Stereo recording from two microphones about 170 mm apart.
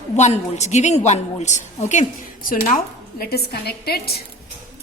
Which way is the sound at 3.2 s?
65° left (ahead or behind).